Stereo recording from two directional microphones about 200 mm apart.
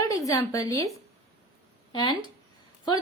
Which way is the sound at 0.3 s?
15° left (ahead or behind).